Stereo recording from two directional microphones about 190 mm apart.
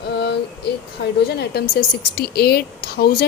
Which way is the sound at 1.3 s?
60° left (ahead or behind).